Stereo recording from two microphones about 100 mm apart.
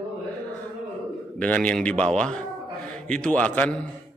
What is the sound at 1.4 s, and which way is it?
A man's voice, 10° left (ahead or behind).